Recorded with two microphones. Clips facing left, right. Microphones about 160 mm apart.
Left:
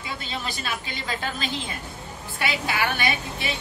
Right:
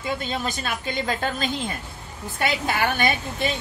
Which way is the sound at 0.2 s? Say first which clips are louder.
Right 4 dB; 45° right (ahead or behind).